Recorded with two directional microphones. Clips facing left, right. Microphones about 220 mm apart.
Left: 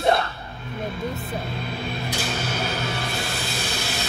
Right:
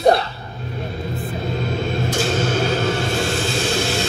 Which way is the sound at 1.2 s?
45° right (ahead or behind).